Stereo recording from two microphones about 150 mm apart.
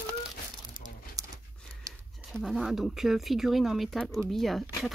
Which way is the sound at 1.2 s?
25° right (ahead or behind).